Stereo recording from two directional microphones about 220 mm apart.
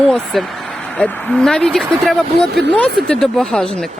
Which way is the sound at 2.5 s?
50° right (ahead or behind).